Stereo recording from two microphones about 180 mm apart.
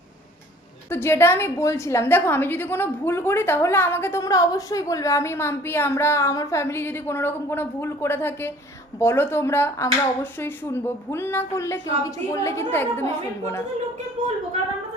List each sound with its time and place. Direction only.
0.9 s a woman's voice: 15° left (ahead or behind)
14.2 s a woman's voice: 40° right (ahead or behind)